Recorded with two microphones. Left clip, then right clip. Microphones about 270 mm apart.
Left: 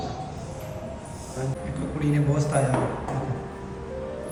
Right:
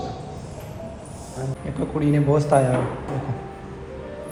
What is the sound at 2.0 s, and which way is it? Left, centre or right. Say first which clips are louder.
Speech: right 6 dB; centre.